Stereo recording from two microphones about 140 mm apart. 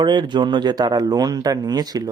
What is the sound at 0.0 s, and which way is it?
Speech, 35° right (ahead or behind).